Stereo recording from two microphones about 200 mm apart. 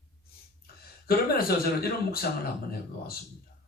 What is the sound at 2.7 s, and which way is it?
Speech, 50° left (ahead or behind).